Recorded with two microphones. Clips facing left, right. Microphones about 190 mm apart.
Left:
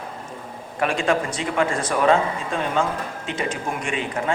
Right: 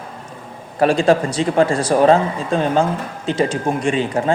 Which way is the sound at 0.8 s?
35° right (ahead or behind).